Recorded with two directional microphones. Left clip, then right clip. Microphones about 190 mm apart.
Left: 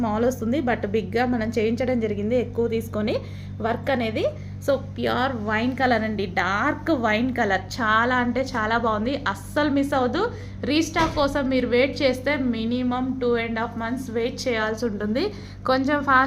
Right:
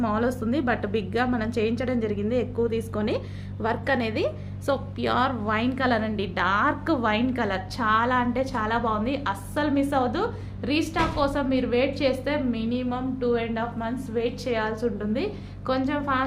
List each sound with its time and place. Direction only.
0.0 s a woman's voice: 10° left (ahead or behind); by 16.2 s 35° left (ahead or behind)